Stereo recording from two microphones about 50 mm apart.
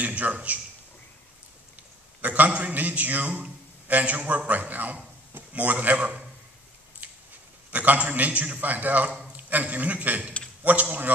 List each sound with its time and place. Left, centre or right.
0.0 s a man's voice: right
2.2 s a man's voice: right
7.0 s a sound: right
7.7 s a man's voice: right